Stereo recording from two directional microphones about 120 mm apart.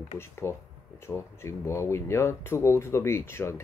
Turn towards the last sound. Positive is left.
turn(degrees=20)  # may be behind; listen again after turning